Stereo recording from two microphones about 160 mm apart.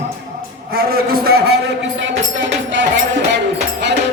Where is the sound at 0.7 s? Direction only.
75° right (ahead or behind).